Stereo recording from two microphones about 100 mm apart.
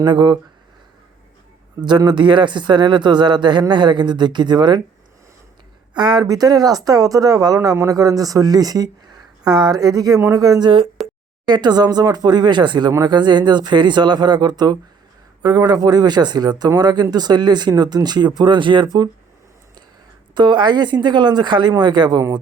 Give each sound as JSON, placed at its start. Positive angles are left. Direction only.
{"t": 0.0, "sound": "speech", "side_deg": -50}
{"t": 1.8, "sound": "speech", "side_deg": -45}
{"t": 6.0, "sound": "speech", "side_deg": -45}
{"t": 11.0, "sound": "a sound", "side_deg": 0}
{"t": 11.4, "sound": "speech", "side_deg": -45}
{"t": 20.3, "sound": "speech", "side_deg": -50}